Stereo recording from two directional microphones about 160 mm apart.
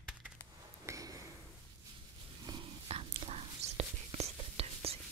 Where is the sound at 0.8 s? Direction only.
20° right (ahead or behind).